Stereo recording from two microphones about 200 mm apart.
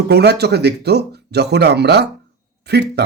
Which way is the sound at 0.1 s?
55° right (ahead or behind).